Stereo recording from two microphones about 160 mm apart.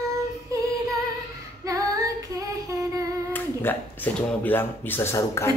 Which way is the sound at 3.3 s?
10° left (ahead or behind).